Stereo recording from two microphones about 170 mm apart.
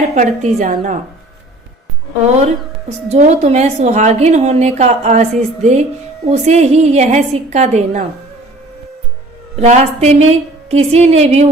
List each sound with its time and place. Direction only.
0.1 s a woman's voice: 45° right (ahead or behind)
3.1 s a woman's voice: 40° right (ahead or behind)
9.6 s a woman's voice: 40° right (ahead or behind)